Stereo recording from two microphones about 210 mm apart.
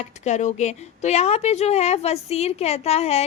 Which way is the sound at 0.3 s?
35° left (ahead or behind).